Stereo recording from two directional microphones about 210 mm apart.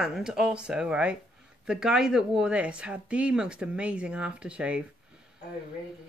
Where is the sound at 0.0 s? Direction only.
5° right (ahead or behind).